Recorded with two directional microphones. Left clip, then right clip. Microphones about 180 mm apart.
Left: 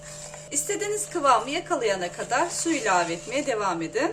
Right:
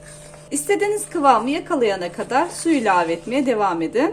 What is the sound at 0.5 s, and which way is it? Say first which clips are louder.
A woman's voice: right 9 dB; 35° right (ahead or behind).